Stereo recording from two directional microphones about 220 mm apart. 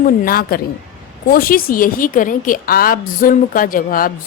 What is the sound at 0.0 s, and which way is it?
A woman's voice, 40° left (ahead or behind).